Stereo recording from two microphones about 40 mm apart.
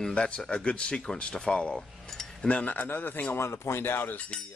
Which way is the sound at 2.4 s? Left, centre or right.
Left.